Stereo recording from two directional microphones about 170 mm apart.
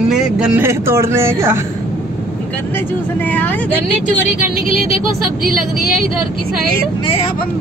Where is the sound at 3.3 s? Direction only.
10° left (ahead or behind).